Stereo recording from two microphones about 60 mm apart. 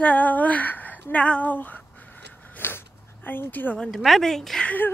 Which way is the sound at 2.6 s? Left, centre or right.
Left.